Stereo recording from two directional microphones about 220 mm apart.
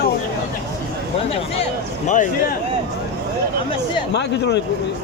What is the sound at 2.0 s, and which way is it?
Speech, 35° left (ahead or behind).